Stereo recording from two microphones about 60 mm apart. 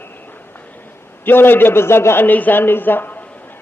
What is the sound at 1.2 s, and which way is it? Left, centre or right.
A man's voice, left.